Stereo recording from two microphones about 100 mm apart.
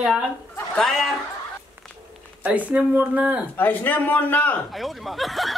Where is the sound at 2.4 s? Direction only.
15° right (ahead or behind).